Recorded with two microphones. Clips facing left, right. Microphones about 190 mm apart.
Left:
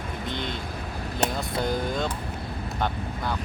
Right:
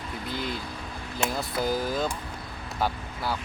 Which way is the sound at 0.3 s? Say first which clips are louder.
Right 1 dB; 5° right (ahead or behind).